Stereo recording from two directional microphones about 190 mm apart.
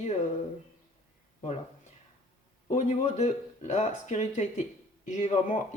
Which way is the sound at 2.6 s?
35° left (ahead or behind).